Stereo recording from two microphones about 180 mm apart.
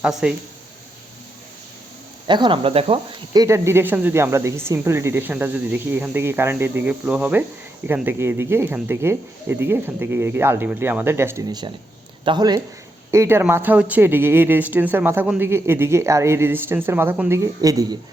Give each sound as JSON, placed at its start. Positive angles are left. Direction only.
{"t": 0.0, "sound": "speech", "side_deg": -5}
{"t": 2.2, "sound": "speech", "side_deg": -25}
{"t": 3.3, "sound": "speech", "side_deg": -15}